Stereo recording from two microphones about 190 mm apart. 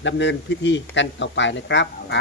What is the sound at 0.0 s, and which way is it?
Speech, 70° left (ahead or behind).